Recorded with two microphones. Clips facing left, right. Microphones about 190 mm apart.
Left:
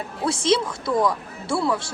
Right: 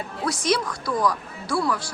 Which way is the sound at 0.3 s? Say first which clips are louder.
Left 3 dB; 25° left (ahead or behind).